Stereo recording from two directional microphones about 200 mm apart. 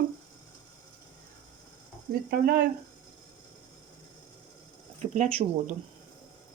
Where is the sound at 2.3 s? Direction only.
45° right (ahead or behind).